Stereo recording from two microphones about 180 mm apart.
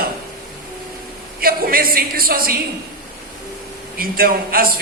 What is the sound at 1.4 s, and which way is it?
A woman's voice, 55° right (ahead or behind).